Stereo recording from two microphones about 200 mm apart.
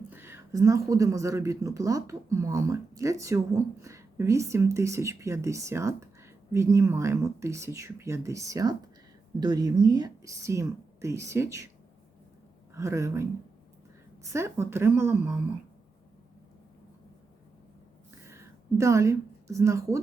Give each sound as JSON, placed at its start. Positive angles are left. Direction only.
{"t": 0.1, "sound": "speech", "side_deg": -10}
{"t": 12.7, "sound": "speech", "side_deg": -15}
{"t": 14.3, "sound": "speech", "side_deg": -15}
{"t": 18.3, "sound": "a sound", "side_deg": -15}